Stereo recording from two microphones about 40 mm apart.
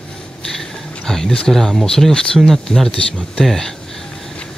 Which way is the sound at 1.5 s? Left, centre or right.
Centre.